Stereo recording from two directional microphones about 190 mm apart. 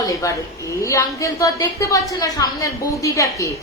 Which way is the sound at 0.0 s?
15° left (ahead or behind).